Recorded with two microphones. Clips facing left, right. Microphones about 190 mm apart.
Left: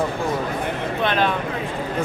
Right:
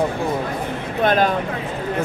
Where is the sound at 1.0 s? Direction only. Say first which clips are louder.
Right 4 dB; 40° right (ahead or behind).